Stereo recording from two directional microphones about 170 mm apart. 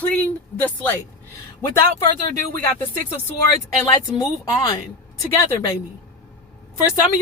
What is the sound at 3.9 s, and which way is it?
Speech, 25° left (ahead or behind).